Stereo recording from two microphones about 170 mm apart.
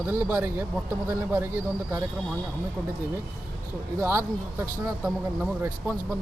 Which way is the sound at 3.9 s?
15° right (ahead or behind).